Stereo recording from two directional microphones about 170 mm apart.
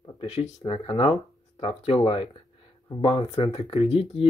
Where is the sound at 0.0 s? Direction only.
35° left (ahead or behind).